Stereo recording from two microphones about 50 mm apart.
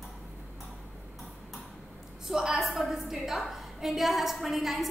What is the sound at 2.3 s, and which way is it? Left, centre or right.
A woman's voice, centre.